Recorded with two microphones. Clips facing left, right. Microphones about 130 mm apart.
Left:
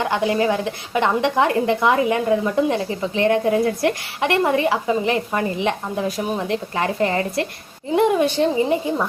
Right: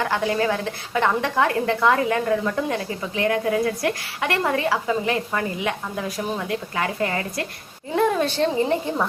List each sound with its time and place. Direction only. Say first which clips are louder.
0.0 s a woman's voice: left 3 dB; 20° left (ahead or behind)
7.9 s a woman's voice: left 3 dB; 15° left (ahead or behind)